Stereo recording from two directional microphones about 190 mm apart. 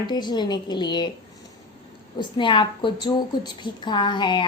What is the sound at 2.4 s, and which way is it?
Speech, 25° left (ahead or behind).